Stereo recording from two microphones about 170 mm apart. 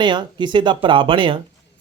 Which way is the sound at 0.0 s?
25° right (ahead or behind).